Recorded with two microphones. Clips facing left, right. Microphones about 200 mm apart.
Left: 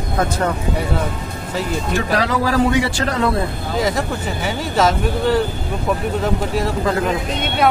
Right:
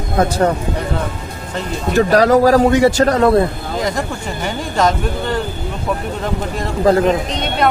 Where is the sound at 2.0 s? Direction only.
45° right (ahead or behind).